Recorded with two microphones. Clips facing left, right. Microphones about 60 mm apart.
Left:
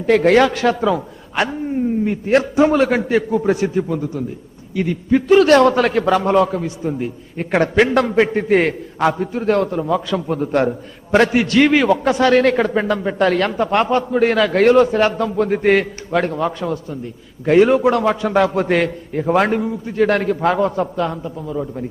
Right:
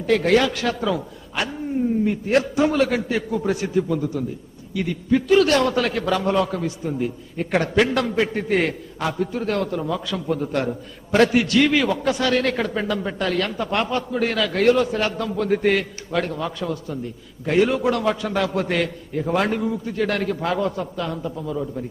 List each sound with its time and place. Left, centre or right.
0.0 s a man's voice: left
6.5 s a man's voice: left